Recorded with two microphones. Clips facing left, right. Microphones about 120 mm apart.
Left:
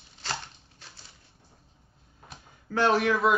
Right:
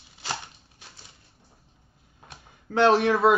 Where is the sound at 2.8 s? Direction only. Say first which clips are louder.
Right 4 dB; 25° right (ahead or behind).